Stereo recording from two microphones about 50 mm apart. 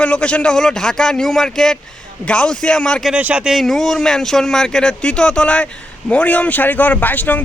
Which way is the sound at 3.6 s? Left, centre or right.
Centre.